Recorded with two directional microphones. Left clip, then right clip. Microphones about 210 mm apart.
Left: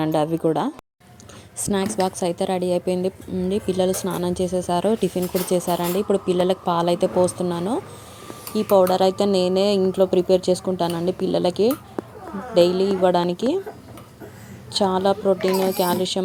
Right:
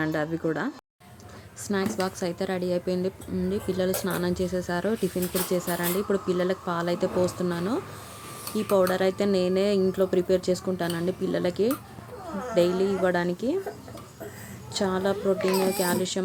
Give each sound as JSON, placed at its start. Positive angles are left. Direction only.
{"t": 0.0, "sound": "speech", "side_deg": 20}
{"t": 14.7, "sound": "speech", "side_deg": 15}